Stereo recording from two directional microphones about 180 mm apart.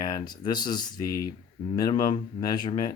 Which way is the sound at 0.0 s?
25° left (ahead or behind).